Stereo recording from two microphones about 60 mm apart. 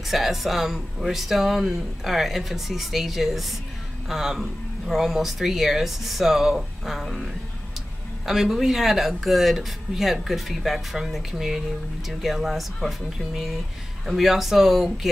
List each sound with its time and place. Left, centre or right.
0.1 s speech: centre
8.3 s speech: centre